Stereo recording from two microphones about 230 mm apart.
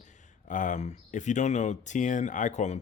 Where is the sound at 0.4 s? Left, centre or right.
Left.